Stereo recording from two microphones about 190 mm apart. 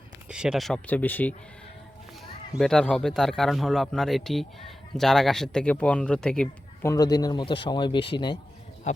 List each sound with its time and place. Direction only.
0.3 s speech: 5° right (ahead or behind)
2.6 s speech: 5° left (ahead or behind)
6.8 s a man's voice: 20° left (ahead or behind)